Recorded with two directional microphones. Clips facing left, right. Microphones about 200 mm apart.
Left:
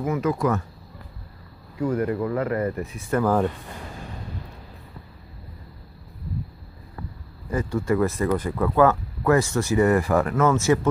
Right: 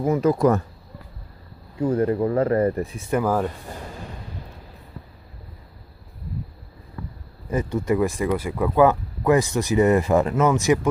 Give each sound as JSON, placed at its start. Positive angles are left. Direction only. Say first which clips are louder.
{"t": 0.0, "sound": "speech", "louder": "right 5 dB", "side_deg": -35}
{"t": 1.8, "sound": "speech", "louder": "right 3 dB", "side_deg": -30}
{"t": 3.1, "sound": "speech", "louder": "left 1 dB", "side_deg": -10}
{"t": 7.4, "sound": "speech", "louder": "right 1 dB", "side_deg": -20}